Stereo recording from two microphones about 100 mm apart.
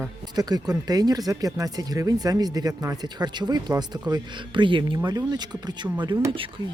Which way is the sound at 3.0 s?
45° right (ahead or behind).